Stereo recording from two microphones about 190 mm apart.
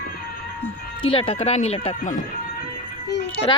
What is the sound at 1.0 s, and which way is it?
Speech, 30° left (ahead or behind).